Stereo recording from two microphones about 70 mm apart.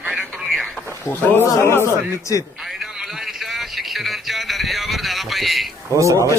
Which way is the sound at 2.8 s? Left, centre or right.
Centre.